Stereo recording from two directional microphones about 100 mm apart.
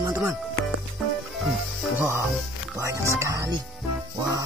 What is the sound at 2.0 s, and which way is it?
Speech, 25° right (ahead or behind).